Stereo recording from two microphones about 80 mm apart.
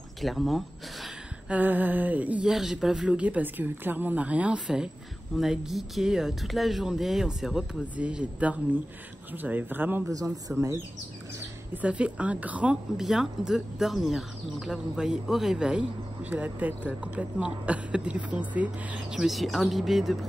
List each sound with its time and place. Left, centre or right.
0.2 s speech: centre
1.5 s a woman's voice: right
2.4 s speech: centre
3.2 s a woman's voice: centre
7.8 s a woman's voice: centre
10.0 s a man's voice: right
11.7 s speech: centre
12.9 s speech: centre